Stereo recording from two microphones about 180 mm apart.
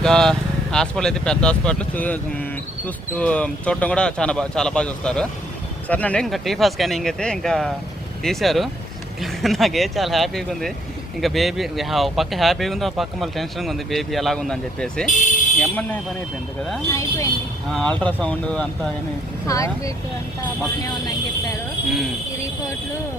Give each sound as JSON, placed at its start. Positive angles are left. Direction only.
{"t": 0.0, "sound": "speech", "side_deg": 5}
{"t": 15.1, "sound": "speech", "side_deg": 45}
{"t": 15.6, "sound": "speech", "side_deg": 10}
{"t": 16.9, "sound": "speech", "side_deg": 15}
{"t": 17.7, "sound": "speech", "side_deg": 5}
{"t": 19.5, "sound": "speech", "side_deg": 15}